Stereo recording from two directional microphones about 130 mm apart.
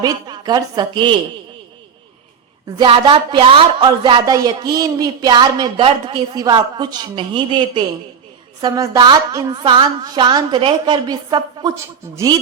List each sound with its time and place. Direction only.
0.0 s a woman's voice: 30° right (ahead or behind)
2.7 s a woman's voice: 40° right (ahead or behind)